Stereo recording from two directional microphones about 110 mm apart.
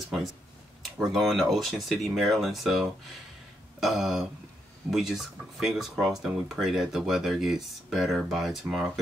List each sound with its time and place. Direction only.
0.9 s speech: centre (ahead or behind)